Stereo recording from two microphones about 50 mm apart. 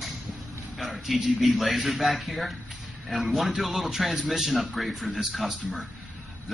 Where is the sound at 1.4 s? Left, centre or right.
Centre.